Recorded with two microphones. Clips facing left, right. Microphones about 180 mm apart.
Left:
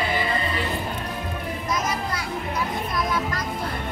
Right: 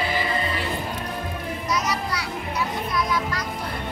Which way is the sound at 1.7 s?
50° left (ahead or behind).